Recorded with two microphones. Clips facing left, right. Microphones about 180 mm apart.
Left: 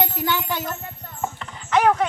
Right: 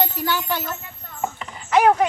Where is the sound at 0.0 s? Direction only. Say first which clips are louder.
Even; 20° left (ahead or behind).